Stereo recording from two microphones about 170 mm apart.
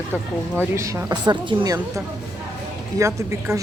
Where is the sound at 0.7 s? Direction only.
15° right (ahead or behind).